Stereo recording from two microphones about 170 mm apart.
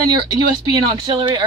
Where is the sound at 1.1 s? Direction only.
25° right (ahead or behind).